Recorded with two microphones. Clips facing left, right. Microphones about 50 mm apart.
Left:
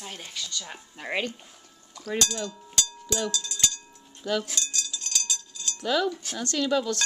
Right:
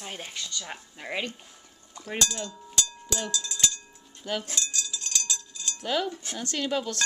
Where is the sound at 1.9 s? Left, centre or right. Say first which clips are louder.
Left 4 dB; right.